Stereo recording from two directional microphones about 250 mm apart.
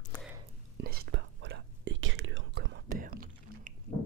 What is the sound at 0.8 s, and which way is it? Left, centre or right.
Whispering, right.